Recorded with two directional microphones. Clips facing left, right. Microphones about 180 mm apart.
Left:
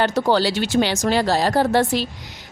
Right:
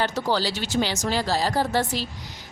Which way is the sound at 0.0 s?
55° left (ahead or behind).